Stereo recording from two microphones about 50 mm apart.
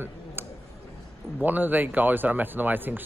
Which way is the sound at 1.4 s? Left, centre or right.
Right.